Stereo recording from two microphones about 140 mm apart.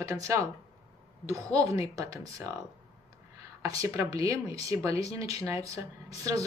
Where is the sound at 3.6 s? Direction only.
20° right (ahead or behind).